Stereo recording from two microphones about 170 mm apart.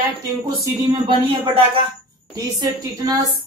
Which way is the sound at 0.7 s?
30° right (ahead or behind).